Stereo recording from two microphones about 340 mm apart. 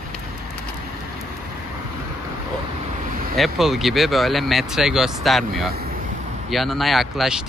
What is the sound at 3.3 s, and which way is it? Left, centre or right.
Speech, centre.